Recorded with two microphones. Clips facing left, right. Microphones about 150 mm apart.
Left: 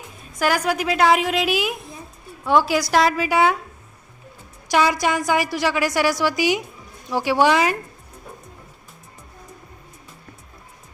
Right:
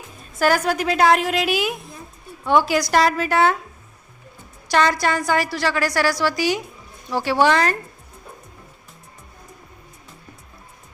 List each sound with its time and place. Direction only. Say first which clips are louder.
0.3 s a woman's voice: right 2 dB; 10° left (ahead or behind)
4.7 s a woman's voice: even; 10° left (ahead or behind)